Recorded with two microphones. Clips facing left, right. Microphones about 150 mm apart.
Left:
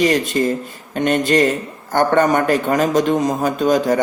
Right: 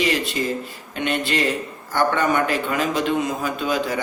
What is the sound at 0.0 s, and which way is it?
Speech, 45° left (ahead or behind).